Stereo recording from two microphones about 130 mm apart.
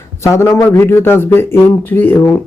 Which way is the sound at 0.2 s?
20° left (ahead or behind).